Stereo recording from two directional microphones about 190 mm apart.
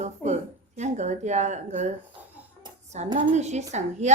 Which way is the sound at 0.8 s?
40° right (ahead or behind).